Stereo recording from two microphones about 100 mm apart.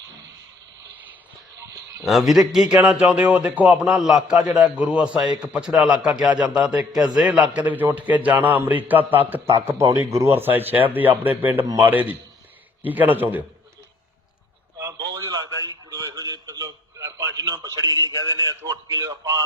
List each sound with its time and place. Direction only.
2.0 s a man's voice: centre (ahead or behind); by 13.4 s 20° right (ahead or behind)
14.8 s a sound: 35° right (ahead or behind)
15.6 s radio: 35° right (ahead or behind)
17.3 s a man's voice: 40° right (ahead or behind)